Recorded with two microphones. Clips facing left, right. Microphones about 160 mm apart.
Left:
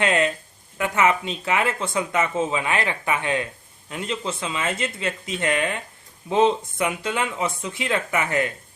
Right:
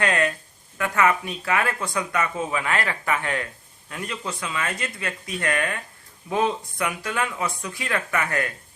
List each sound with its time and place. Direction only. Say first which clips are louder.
0.0 s speech: left 2 dB; 20° left (ahead or behind)